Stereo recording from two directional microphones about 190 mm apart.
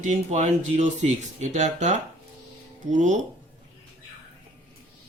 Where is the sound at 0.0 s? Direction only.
40° right (ahead or behind).